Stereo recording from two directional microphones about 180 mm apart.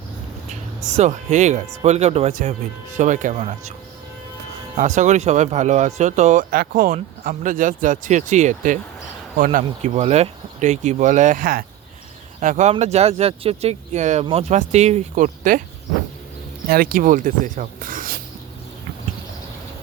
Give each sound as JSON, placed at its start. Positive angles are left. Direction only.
{"t": 0.9, "sound": "speech", "side_deg": -40}
{"t": 4.8, "sound": "speech", "side_deg": -40}
{"t": 16.6, "sound": "speech", "side_deg": -55}